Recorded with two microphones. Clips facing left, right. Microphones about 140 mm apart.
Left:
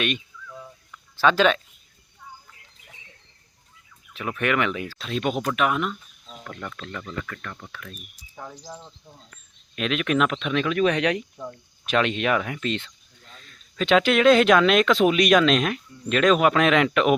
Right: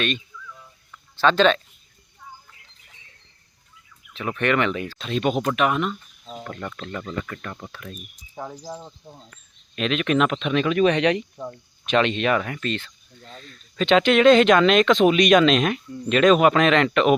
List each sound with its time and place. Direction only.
1.1 s speech: 10° left (ahead or behind)
4.1 s speech: 5° left (ahead or behind); by 9.2 s 30° right (ahead or behind)
9.7 s speech: 5° left (ahead or behind); by 12.9 s 20° left (ahead or behind)
13.4 s speech: 5° left (ahead or behind)